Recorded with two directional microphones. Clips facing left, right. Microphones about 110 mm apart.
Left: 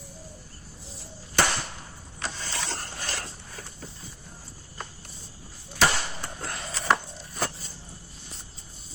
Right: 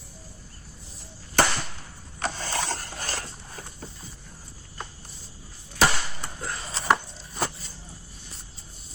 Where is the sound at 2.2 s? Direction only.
50° right (ahead or behind).